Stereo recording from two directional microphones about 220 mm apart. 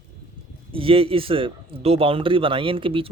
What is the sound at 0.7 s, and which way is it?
A man's voice, 25° right (ahead or behind).